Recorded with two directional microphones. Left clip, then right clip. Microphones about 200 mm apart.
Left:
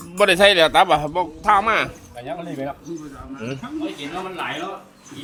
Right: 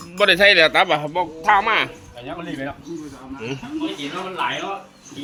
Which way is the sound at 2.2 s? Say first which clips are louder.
Left 1 dB; 55° left (ahead or behind).